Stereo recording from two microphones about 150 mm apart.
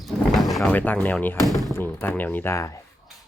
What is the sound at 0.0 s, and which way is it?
Sliding door, centre (ahead or behind).